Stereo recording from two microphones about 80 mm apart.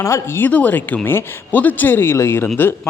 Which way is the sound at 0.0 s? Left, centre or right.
Left.